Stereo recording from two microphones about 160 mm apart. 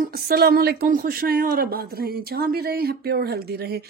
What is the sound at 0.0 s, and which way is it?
Speech, 70° right (ahead or behind).